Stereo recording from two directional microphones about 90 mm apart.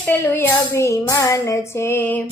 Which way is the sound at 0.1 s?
30° left (ahead or behind).